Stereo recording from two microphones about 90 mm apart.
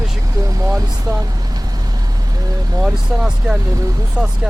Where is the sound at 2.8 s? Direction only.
5° right (ahead or behind).